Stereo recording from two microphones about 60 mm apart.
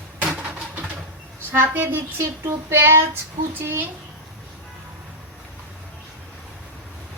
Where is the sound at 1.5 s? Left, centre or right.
Right.